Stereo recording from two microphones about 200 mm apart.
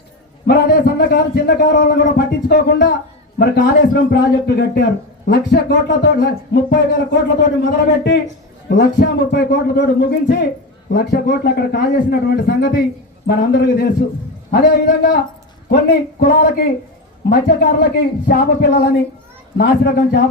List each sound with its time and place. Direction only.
0.4 s a man's voice: 50° left (ahead or behind)